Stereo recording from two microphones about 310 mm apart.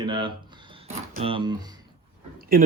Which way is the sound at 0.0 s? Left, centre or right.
Centre.